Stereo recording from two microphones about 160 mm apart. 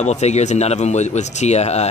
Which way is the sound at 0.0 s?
45° left (ahead or behind).